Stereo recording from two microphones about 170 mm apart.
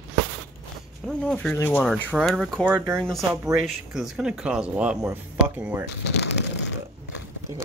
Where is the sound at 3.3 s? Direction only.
10° right (ahead or behind).